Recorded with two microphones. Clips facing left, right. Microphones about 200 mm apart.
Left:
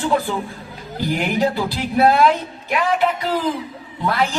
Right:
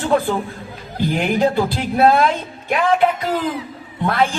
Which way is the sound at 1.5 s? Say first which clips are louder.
Right 2 dB; 50° right (ahead or behind).